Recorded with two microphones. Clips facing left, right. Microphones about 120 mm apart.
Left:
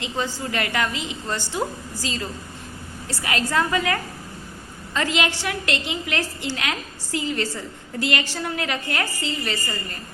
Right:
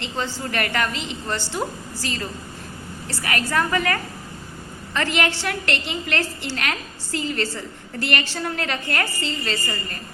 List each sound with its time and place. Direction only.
0.0 s a woman's voice: 15° left (ahead or behind)